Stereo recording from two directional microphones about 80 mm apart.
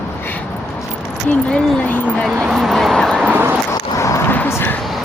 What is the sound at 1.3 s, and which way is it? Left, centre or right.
Speech, centre.